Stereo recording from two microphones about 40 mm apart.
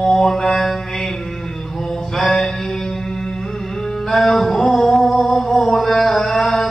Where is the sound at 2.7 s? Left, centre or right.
Centre.